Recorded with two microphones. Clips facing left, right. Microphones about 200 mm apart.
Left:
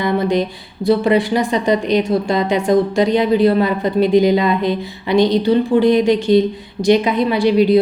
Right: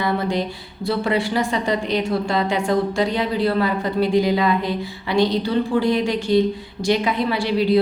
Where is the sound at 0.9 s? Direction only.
20° left (ahead or behind).